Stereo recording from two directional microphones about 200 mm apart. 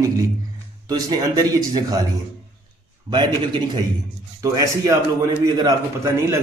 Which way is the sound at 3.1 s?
20° right (ahead or behind).